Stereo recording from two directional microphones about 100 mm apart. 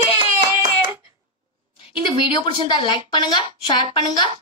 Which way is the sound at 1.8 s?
60° left (ahead or behind).